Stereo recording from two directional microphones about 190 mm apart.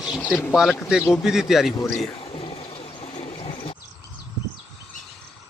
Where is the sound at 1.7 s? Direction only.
15° left (ahead or behind).